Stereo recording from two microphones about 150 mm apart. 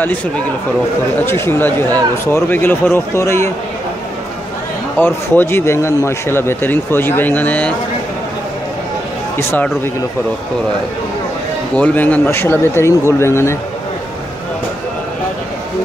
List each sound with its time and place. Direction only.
1.2 s a man's voice: 15° left (ahead or behind)
4.9 s a man's voice: 15° left (ahead or behind)
11.7 s a man's voice: 10° left (ahead or behind)